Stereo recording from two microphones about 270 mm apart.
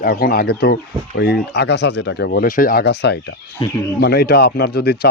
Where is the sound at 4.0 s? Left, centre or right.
Left.